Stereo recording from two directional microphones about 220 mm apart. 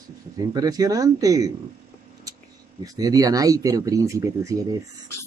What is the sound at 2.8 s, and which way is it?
Speech, 15° right (ahead or behind).